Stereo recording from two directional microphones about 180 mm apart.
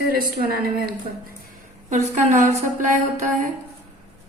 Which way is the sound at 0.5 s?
55° right (ahead or behind).